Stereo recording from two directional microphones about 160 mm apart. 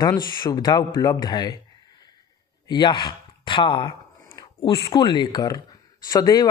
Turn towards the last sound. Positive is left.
turn(degrees=25)  # may be behind; listen again after turning